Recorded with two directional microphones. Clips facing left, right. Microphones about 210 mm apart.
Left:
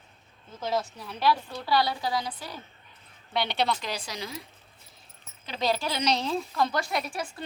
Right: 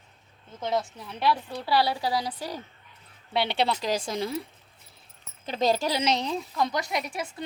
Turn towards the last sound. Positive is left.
turn(degrees=-20)  # may be behind; listen again after turning